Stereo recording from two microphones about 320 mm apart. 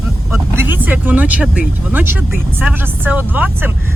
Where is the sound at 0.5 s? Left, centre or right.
Centre.